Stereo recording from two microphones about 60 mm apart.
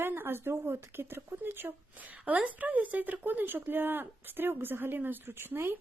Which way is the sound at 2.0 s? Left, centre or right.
Right.